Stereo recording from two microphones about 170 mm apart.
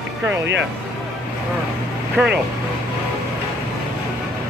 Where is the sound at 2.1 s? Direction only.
10° right (ahead or behind).